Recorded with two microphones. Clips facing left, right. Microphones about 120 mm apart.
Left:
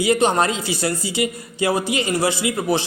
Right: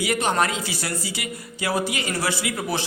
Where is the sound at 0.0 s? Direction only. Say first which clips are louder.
Left 5 dB; 25° left (ahead or behind).